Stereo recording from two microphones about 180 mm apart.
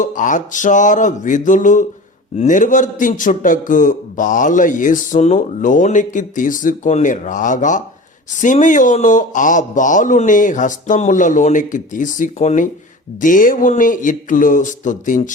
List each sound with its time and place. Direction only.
0.0 s a man's voice: 45° left (ahead or behind)